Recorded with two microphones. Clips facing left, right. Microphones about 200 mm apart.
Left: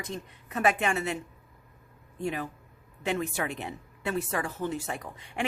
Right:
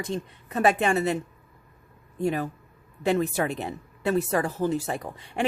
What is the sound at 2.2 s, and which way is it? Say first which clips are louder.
A woman's voice: right 6 dB; 40° right (ahead or behind).